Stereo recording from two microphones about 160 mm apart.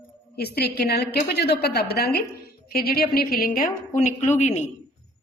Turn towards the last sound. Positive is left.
turn(degrees=45)  # may be behind; listen again after turning